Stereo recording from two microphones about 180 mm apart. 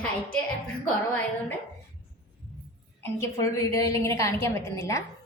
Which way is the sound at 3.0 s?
15° left (ahead or behind).